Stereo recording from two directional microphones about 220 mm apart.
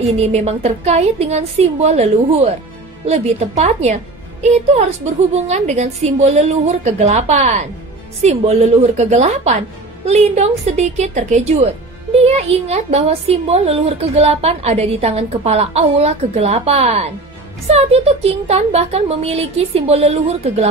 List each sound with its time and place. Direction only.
0.2 s a woman's voice: 30° right (ahead or behind)
12.6 s a woman's voice: 30° right (ahead or behind)